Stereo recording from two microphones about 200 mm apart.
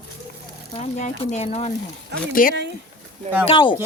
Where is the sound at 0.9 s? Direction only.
35° left (ahead or behind).